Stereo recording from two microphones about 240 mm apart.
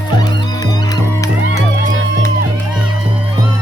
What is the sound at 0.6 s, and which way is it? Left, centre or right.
Music, centre.